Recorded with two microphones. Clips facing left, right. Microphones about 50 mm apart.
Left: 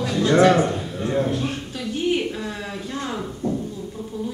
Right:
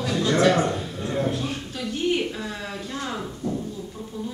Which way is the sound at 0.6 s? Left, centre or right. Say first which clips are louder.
Left 2 dB; centre.